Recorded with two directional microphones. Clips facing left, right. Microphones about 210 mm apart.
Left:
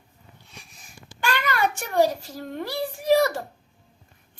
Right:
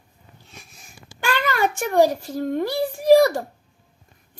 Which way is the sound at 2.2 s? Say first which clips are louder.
Right 9 dB; 50° right (ahead or behind).